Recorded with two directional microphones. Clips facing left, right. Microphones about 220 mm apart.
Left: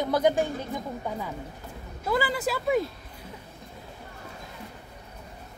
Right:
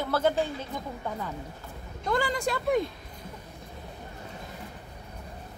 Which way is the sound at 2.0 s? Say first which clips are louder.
Left 1 dB; 5° left (ahead or behind).